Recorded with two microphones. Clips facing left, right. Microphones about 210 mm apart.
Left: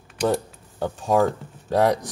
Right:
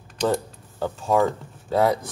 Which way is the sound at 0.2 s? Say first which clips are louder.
Left 1 dB; 15° left (ahead or behind).